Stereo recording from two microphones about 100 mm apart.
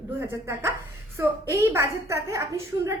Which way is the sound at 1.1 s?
30° right (ahead or behind).